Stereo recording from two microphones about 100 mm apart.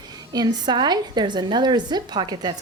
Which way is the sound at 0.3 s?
45° right (ahead or behind).